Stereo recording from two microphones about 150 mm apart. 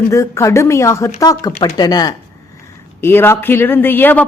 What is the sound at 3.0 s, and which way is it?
Speech, 15° left (ahead or behind).